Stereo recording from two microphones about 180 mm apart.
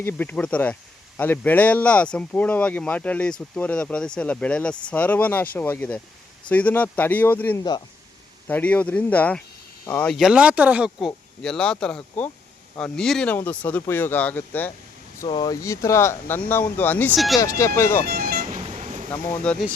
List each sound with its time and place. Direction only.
0.0 s speech: 10° left (ahead or behind)
10.1 s speech: centre (ahead or behind)
15.2 s speech: 20° left (ahead or behind)
18.0 s music: 60° right (ahead or behind)
18.6 s vehicle: 40° right (ahead or behind)
19.1 s speech: 5° left (ahead or behind)